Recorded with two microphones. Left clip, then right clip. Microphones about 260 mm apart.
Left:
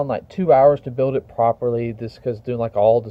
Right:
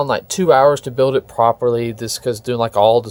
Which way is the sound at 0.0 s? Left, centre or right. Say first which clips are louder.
Right 5 dB; centre.